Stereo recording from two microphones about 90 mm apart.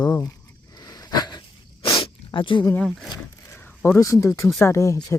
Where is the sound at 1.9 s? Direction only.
85° left.